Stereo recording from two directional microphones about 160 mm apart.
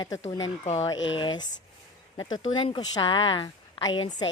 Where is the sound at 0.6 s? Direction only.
45° left (ahead or behind).